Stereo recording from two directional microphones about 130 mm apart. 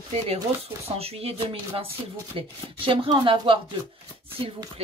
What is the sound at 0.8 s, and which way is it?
Speech, 50° right (ahead or behind).